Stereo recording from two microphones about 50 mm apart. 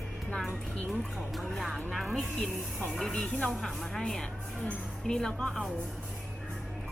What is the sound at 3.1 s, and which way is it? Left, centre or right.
Speech, left.